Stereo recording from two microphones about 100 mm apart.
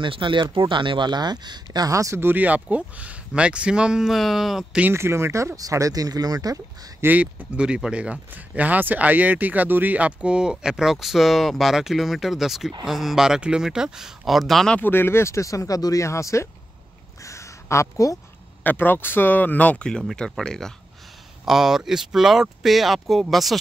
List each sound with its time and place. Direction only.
0.0 s speech: 55° right (ahead or behind); by 4.8 s 5° right (ahead or behind)
4.8 s speech: 25° right (ahead or behind)
7.0 s speech: 15° right (ahead or behind); by 14.8 s 5° left (ahead or behind)
14.8 s speech: 20° left (ahead or behind)
17.2 s a sound: 30° left (ahead or behind)
18.6 s speech: 20° left (ahead or behind); by 23.6 s centre (ahead or behind)